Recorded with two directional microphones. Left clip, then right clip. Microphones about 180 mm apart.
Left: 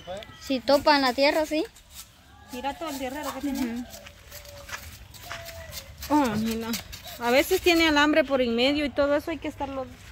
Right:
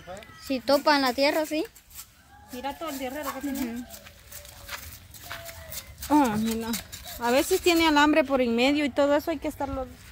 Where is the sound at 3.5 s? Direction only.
5° left (ahead or behind).